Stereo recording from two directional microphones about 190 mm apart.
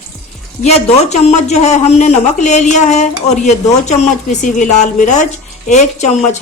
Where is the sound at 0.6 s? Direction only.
35° left (ahead or behind).